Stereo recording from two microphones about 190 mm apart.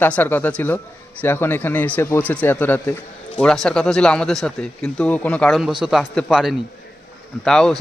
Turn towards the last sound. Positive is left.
turn(degrees=5)  # may be behind; listen again after turning